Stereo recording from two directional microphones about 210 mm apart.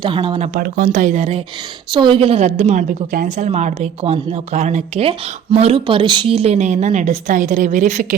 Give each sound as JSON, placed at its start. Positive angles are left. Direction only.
{"t": 0.0, "sound": "a woman's voice", "side_deg": -25}